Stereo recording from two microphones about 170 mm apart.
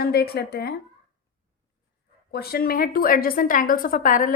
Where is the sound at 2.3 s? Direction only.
65° left (ahead or behind).